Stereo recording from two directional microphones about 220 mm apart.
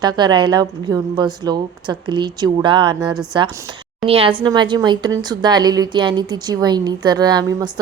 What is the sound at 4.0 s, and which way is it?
A woman's voice, 25° right (ahead or behind).